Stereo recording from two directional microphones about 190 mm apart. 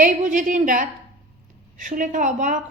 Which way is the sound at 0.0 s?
45° right (ahead or behind).